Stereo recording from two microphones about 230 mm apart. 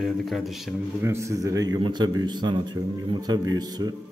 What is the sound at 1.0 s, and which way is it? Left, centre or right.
A man's voice, centre.